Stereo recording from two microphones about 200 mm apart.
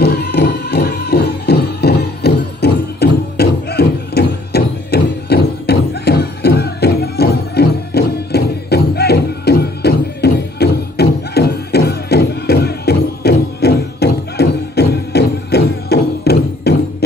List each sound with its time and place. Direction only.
0.0 s music: 50° left (ahead or behind)